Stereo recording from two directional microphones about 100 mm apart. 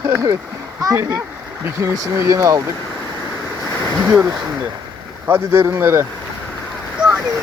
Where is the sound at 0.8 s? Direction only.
35° right (ahead or behind).